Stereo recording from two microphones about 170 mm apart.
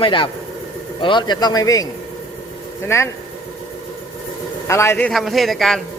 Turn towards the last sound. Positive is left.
turn(degrees=0)  # may be behind; listen again after turning